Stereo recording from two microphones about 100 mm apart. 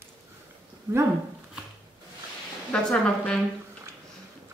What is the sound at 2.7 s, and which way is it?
Speech, 10° left (ahead or behind).